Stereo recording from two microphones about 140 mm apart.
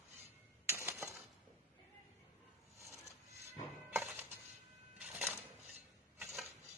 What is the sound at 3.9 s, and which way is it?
Music, 15° right (ahead or behind).